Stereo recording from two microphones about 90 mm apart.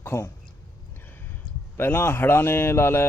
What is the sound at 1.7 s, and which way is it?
Speech, 25° left (ahead or behind).